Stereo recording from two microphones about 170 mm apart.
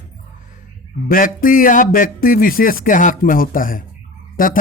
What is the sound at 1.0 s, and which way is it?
Speech, 55° left (ahead or behind).